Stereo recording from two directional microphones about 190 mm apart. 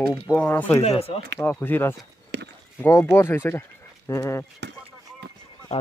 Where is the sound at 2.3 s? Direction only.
65° right (ahead or behind).